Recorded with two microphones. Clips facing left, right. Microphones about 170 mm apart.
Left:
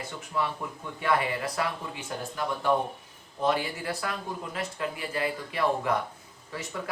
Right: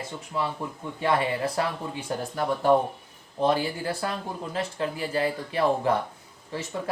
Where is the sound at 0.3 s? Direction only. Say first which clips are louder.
Right 1 dB; 25° right (ahead or behind).